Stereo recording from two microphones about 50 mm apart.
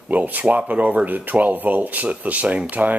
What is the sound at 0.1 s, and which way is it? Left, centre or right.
Speech, right.